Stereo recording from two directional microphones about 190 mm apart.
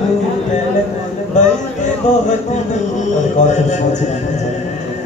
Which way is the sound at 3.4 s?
40° left (ahead or behind).